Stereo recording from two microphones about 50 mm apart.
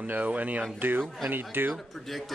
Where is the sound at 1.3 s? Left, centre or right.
Right.